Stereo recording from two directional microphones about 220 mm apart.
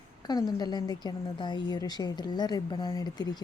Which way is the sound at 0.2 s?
20° left (ahead or behind).